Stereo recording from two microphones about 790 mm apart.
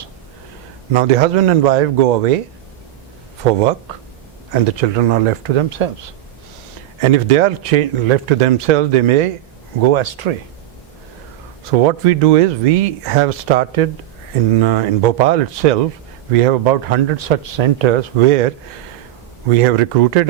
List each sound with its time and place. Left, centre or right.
0.9 s speech: right
4.5 s speech: right
7.0 s speech: right
11.8 s speech: right
19.5 s speech: right